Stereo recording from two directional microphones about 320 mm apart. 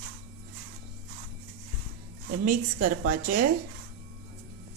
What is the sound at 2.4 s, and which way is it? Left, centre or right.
A woman's voice, right.